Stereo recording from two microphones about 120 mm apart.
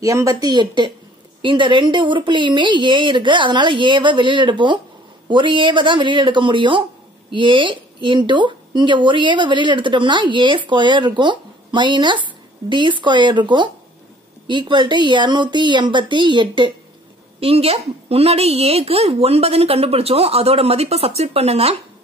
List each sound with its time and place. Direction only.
0.0 s speech: 30° right (ahead or behind)
17.4 s a woman's voice: 55° right (ahead or behind)